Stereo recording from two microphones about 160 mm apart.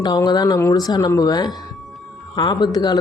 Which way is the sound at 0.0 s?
25° left (ahead or behind).